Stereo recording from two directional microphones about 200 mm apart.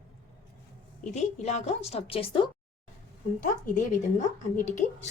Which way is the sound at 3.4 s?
40° left (ahead or behind).